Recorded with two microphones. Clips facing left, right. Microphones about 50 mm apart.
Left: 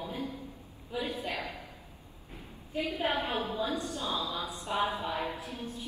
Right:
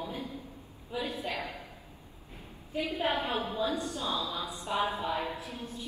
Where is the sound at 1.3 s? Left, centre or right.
Right.